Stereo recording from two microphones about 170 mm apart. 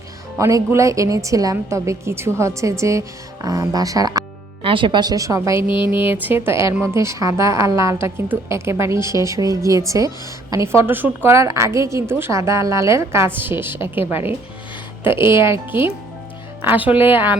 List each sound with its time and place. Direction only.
0.3 s a woman's voice: 15° right (ahead or behind)
5.6 s speech: 30° left (ahead or behind)
6.1 s a woman's voice: 10° right (ahead or behind)
15.4 s a woman's voice: 15° right (ahead or behind)